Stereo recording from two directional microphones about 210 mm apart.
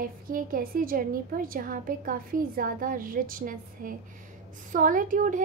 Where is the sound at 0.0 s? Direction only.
40° right (ahead or behind).